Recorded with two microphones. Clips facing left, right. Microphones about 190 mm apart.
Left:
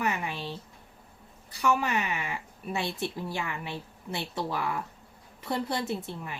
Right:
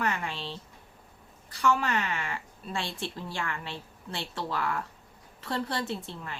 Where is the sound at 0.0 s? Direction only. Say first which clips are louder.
Left 1 dB; 10° left (ahead or behind).